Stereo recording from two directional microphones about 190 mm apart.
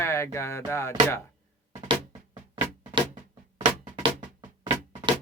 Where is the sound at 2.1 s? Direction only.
25° right (ahead or behind).